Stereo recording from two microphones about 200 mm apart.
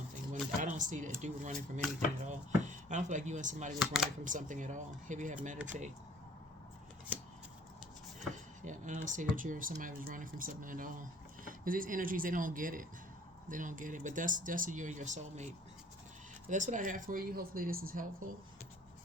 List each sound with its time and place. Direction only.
0.6 s a sound: 40° right (ahead or behind)
1.2 s speech: 35° right (ahead or behind)
3.8 s speech: centre (ahead or behind)
4.2 s speech: 40° right (ahead or behind)
8.6 s speech: 40° right (ahead or behind)
16.5 s speech: 40° right (ahead or behind)